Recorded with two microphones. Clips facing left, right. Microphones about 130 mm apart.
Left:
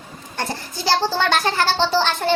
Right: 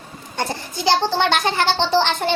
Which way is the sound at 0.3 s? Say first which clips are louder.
Right 2 dB; 20° right (ahead or behind).